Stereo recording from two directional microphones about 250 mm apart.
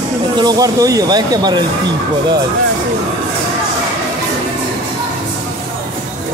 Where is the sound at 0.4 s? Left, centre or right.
Centre.